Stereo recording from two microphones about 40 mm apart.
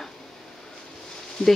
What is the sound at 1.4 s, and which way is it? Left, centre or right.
Speech, left.